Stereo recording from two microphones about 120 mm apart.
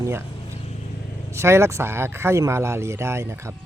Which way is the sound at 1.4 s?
20° right (ahead or behind).